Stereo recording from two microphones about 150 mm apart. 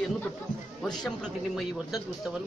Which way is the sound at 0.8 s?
5° left (ahead or behind).